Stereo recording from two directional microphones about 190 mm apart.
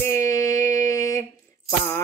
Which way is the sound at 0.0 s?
15° left (ahead or behind).